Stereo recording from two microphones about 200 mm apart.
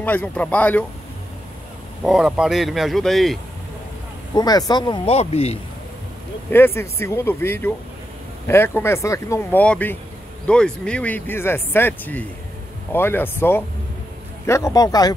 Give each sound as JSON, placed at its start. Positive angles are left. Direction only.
{"t": 0.0, "sound": "speech", "side_deg": 10}
{"t": 2.0, "sound": "speech", "side_deg": -5}
{"t": 4.3, "sound": "speech", "side_deg": 20}
{"t": 6.5, "sound": "speech", "side_deg": 10}